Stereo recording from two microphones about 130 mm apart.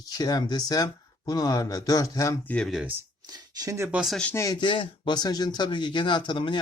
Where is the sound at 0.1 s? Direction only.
30° left (ahead or behind).